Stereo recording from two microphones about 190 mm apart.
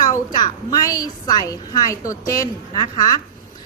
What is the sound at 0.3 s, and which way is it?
A woman's voice, 20° left (ahead or behind).